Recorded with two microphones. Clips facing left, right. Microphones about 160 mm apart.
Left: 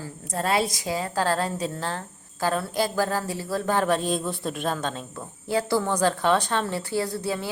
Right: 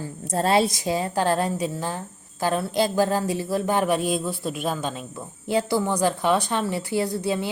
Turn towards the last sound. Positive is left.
turn(degrees=-20)  # may be behind; listen again after turning